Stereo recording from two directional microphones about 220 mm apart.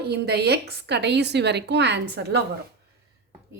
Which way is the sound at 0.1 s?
50° right (ahead or behind).